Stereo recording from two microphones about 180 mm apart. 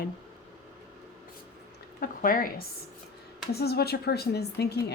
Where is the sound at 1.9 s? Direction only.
50° left (ahead or behind).